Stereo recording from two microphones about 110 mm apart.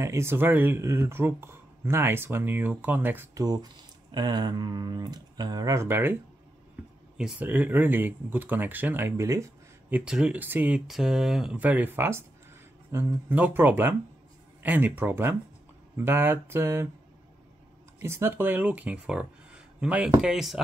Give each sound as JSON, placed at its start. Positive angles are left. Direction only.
{"t": 0.0, "sound": "speech", "side_deg": -25}
{"t": 3.3, "sound": "speech", "side_deg": -35}
{"t": 7.2, "sound": "speech", "side_deg": -10}
{"t": 10.0, "sound": "speech", "side_deg": -5}
{"t": 10.9, "sound": "speech", "side_deg": -5}
{"t": 18.0, "sound": "speech", "side_deg": -20}